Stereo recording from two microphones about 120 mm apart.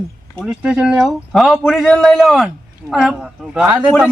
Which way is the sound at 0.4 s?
5° right (ahead or behind).